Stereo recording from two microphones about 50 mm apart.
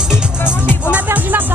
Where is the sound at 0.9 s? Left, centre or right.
Right.